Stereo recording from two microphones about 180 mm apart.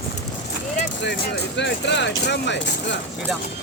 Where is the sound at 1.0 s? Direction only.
75° left (ahead or behind).